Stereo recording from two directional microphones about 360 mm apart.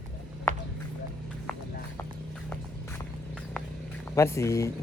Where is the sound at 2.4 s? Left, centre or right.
Centre.